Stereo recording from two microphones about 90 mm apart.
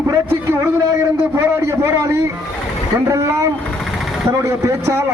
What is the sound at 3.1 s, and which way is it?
Speech, 35° right (ahead or behind).